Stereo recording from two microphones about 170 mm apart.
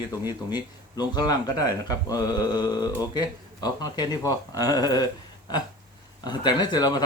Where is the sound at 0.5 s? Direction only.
25° left (ahead or behind).